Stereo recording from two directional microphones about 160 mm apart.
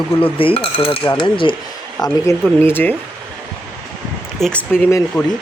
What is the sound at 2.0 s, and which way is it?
Speech, 20° left (ahead or behind).